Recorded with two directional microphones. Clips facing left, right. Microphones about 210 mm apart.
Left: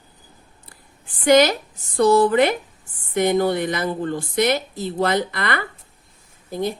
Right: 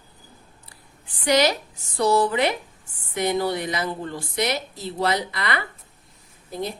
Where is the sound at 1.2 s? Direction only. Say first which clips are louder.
Left 5 dB; 50° left (ahead or behind).